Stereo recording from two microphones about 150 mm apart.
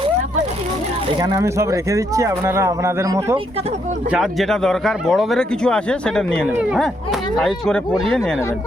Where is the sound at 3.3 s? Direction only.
40° right (ahead or behind).